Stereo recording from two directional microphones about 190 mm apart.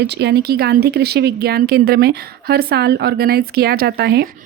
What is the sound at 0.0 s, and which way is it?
Speech, 60° right (ahead or behind).